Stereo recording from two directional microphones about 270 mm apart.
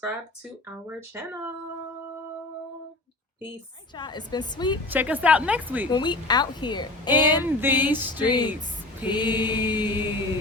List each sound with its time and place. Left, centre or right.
0.9 s speech: centre
3.9 s a woman's voice: centre
4.9 s speech: centre
5.9 s a woman's voice: centre
7.4 s speech: centre
8.2 s a woman's voice: centre
9.7 s speech: centre